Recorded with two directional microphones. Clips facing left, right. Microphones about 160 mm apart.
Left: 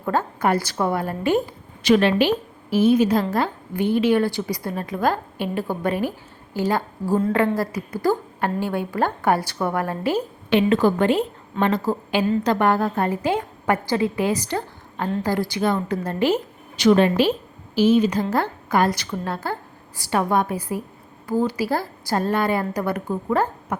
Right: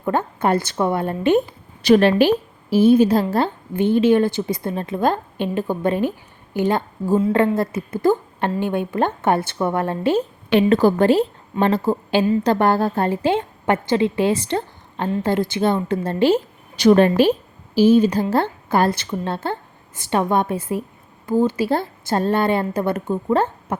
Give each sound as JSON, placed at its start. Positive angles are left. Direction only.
{"t": 0.0, "sound": "a woman's voice", "side_deg": -20}
{"t": 1.8, "sound": "a woman's voice", "side_deg": -40}
{"t": 16.8, "sound": "a woman's voice", "side_deg": -45}
{"t": 17.7, "sound": "a woman's voice", "side_deg": -30}